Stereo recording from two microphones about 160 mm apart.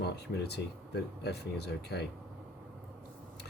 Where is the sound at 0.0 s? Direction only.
90° left.